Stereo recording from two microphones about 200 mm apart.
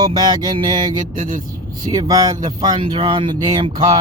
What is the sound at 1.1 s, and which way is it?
Speech, 40° right (ahead or behind).